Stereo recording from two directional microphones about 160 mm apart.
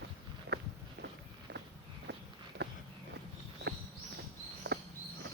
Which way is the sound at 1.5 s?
90° right.